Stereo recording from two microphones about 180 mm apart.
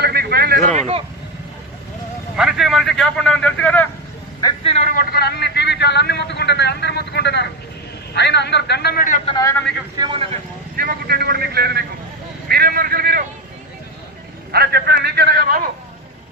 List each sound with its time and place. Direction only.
0.0 s a sound: 60° right (ahead or behind)
0.7 s speech: 35° right (ahead or behind)
2.3 s a man's voice: centre (ahead or behind)
4.4 s a man's voice: 20° left (ahead or behind)
4.9 s speech: 60° left (ahead or behind)
9.4 s a man's voice: 15° left (ahead or behind)
9.9 s a man's voice: 25° right (ahead or behind)
10.8 s a man's voice: 60° right (ahead or behind)
14.5 s a man's voice: 60° right (ahead or behind)